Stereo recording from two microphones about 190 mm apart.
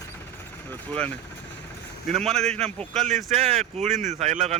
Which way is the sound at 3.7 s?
35° right (ahead or behind).